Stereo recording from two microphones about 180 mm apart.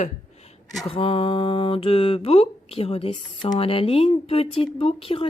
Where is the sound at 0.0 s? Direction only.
40° left (ahead or behind).